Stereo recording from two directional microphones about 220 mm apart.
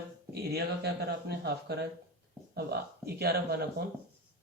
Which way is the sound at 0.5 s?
45° right (ahead or behind).